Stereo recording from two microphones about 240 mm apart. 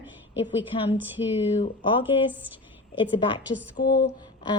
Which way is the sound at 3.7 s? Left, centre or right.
Left.